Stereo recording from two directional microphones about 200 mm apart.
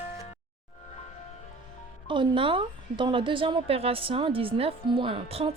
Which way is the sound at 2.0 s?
25° right (ahead or behind).